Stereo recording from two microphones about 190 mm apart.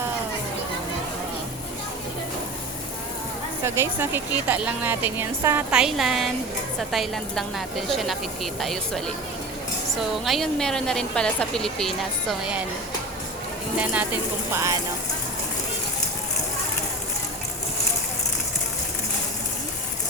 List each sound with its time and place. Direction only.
3.6 s a woman's voice: 15° right (ahead or behind)
13.7 s a woman's voice: 5° right (ahead or behind)